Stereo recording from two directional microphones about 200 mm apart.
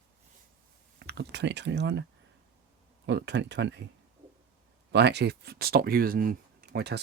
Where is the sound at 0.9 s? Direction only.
55° right (ahead or behind).